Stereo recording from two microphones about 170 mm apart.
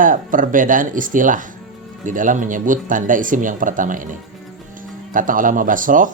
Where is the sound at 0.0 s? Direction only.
50° right (ahead or behind).